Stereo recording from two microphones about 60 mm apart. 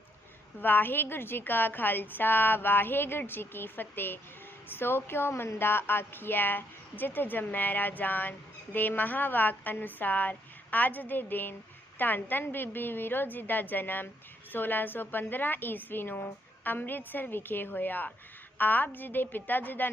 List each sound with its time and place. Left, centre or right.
0.6 s a woman's voice: left